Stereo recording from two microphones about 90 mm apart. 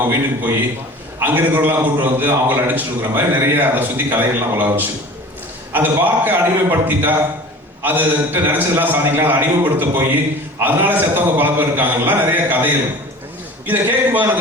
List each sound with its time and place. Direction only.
0.0 s a man's voice: 20° right (ahead or behind)